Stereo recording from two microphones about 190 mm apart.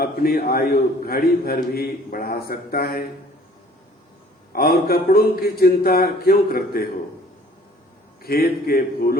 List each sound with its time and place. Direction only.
0.0 s a man's voice: 50° left (ahead or behind)
4.5 s a man's voice: 50° left (ahead or behind)
8.2 s a man's voice: 50° left (ahead or behind)